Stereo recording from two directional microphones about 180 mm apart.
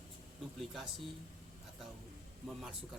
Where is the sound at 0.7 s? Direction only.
Centre (ahead or behind).